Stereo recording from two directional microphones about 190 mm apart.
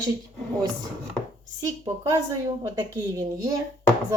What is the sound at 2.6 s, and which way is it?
Speech, 20° right (ahead or behind).